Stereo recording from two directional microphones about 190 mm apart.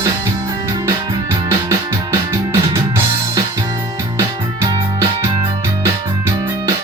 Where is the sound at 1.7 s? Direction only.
15° right (ahead or behind).